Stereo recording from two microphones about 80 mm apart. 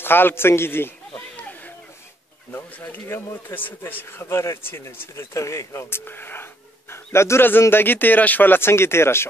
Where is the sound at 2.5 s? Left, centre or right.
Left.